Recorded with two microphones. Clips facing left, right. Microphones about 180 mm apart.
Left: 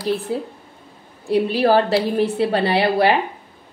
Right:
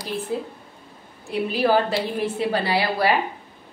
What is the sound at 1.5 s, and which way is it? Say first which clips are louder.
Speech: left 2 dB; 35° left (ahead or behind).